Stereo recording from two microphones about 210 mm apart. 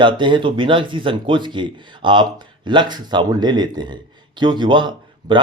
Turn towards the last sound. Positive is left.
turn(degrees=-20)  # may be behind; listen again after turning